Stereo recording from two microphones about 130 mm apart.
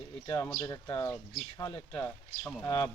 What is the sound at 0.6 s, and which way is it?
Speech, 25° left (ahead or behind).